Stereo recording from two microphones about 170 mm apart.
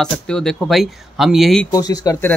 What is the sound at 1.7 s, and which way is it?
Speech, 20° left (ahead or behind).